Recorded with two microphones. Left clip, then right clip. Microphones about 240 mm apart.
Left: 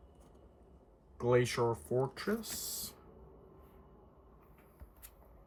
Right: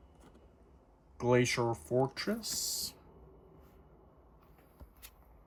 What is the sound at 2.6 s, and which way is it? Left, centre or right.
Speech, centre.